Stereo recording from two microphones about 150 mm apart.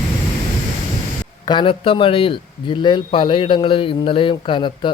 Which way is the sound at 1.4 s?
30° left (ahead or behind).